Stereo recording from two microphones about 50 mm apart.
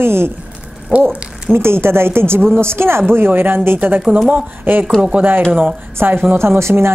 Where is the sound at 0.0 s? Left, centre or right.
Right.